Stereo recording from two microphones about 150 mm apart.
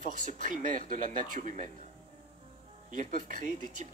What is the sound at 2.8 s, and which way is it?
Speech, 60° right (ahead or behind).